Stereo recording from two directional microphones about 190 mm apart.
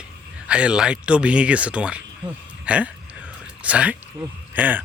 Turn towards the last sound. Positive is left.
turn(degrees=-10)  # may be behind; listen again after turning